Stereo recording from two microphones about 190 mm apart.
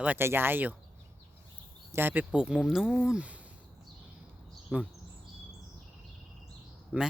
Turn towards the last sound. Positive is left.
turn(degrees=-5)  # may be behind; listen again after turning